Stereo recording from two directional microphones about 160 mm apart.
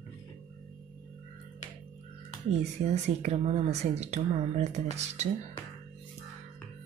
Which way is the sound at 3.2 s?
45° right (ahead or behind).